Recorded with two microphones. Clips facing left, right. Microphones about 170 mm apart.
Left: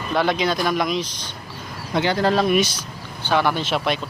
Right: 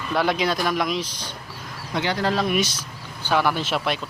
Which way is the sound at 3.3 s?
5° right (ahead or behind).